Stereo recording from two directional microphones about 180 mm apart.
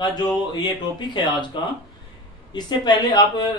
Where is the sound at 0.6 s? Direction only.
25° left (ahead or behind).